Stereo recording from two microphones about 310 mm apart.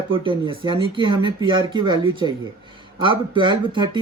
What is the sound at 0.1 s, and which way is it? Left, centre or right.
Speech, centre.